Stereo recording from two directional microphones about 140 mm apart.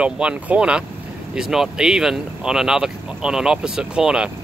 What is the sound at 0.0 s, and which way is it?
Speech, 10° right (ahead or behind).